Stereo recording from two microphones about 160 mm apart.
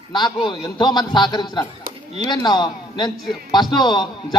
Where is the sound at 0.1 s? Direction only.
25° left (ahead or behind).